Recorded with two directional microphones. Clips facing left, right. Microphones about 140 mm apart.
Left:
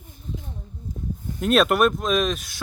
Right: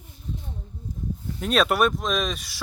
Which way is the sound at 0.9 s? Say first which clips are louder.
Left 2 dB; 90° left.